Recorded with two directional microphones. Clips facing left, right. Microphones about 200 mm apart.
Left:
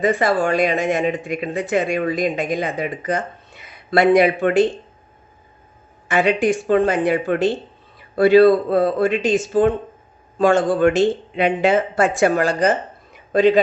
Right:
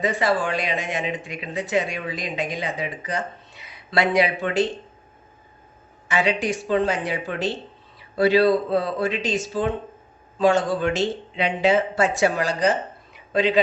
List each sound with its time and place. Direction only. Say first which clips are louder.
0.0 s speech: left 5 dB; 50° left (ahead or behind)
6.1 s speech: left 6 dB; 55° left (ahead or behind)
13.1 s a sound: left 7 dB; 45° left (ahead or behind)